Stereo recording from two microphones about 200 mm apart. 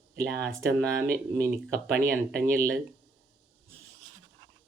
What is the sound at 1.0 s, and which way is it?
Speech, 50° right (ahead or behind).